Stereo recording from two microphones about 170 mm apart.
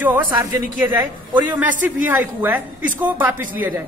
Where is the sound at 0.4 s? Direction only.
10° right (ahead or behind).